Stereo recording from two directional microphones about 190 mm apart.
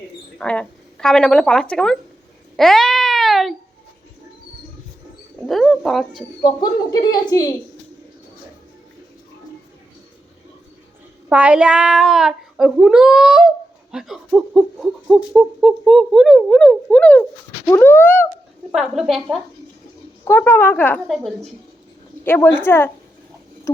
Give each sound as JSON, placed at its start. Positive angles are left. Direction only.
{"t": 0.3, "sound": "a woman's voice", "side_deg": 5}
{"t": 2.6, "sound": "a sound", "side_deg": 0}
{"t": 5.4, "sound": "speech", "side_deg": 0}
{"t": 6.4, "sound": "a woman's voice", "side_deg": 20}
{"t": 11.3, "sound": "speech", "side_deg": -5}
{"t": 17.7, "sound": "a sound", "side_deg": 10}
{"t": 18.7, "sound": "speech", "side_deg": 0}
{"t": 20.2, "sound": "a woman's voice", "side_deg": 10}
{"t": 22.2, "sound": "a woman's voice", "side_deg": 10}